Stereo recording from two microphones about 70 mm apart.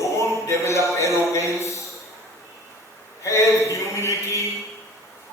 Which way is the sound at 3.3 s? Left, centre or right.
Left.